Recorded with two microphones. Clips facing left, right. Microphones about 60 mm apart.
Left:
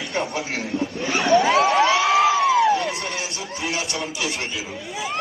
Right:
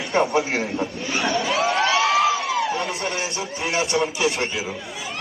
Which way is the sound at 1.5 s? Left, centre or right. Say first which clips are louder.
Left 4 dB; left.